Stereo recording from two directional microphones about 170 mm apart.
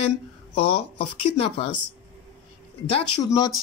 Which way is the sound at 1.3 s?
35° left (ahead or behind).